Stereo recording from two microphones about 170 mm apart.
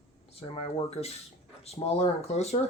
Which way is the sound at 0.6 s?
35° left (ahead or behind).